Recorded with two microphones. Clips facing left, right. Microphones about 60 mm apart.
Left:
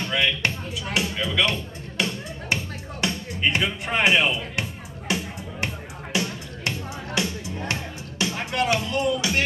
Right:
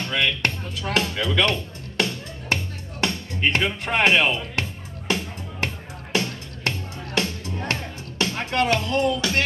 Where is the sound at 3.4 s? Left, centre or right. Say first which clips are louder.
Right 1 dB; right.